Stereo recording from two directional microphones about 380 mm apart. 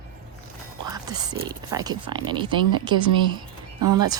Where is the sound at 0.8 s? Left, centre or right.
Centre.